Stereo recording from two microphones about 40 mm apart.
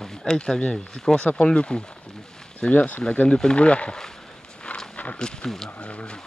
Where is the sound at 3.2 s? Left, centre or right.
Left.